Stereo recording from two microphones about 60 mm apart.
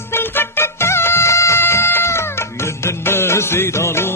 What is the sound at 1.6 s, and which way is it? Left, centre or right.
Music, left.